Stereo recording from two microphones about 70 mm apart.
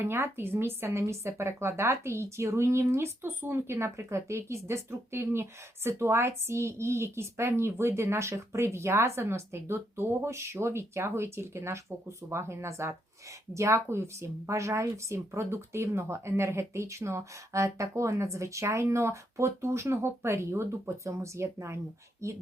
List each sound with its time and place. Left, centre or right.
0.0 s a woman's voice: right